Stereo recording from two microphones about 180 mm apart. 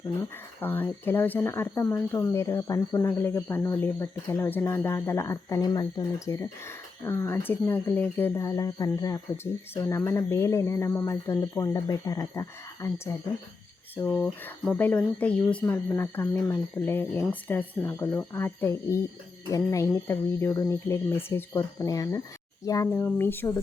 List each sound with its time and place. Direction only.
0.6 s speech: 10° left (ahead or behind)